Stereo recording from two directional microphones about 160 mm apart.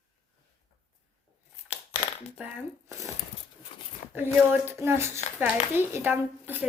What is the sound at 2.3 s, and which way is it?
Speech, 15° right (ahead or behind).